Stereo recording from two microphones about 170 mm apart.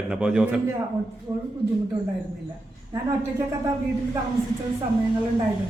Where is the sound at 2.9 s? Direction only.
20° right (ahead or behind).